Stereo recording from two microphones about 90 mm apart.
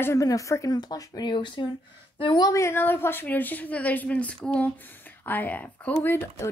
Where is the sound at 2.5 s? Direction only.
30° left (ahead or behind).